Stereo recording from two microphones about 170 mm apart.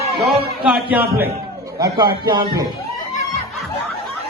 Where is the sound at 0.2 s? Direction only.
5° right (ahead or behind).